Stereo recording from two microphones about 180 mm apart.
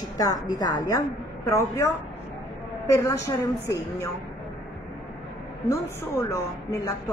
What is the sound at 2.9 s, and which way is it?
A woman's voice, 15° left (ahead or behind).